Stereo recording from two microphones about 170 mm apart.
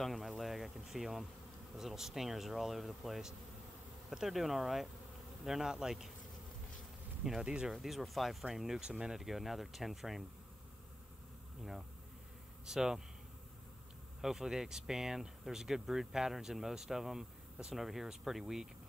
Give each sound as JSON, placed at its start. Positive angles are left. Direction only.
{"t": 0.0, "sound": "speech", "side_deg": 0}
{"t": 7.2, "sound": "speech", "side_deg": -5}
{"t": 12.6, "sound": "speech", "side_deg": -5}
{"t": 14.2, "sound": "speech", "side_deg": 0}